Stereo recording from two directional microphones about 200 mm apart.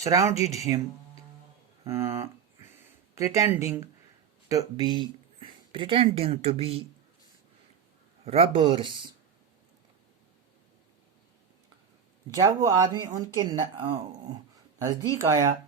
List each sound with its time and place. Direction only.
0.0 s speech: 15° right (ahead or behind)
2.7 s a sound: 15° right (ahead or behind)
4.4 s speech: 15° right (ahead or behind)
8.2 s speech: 30° right (ahead or behind)
12.3 s speech: 15° right (ahead or behind)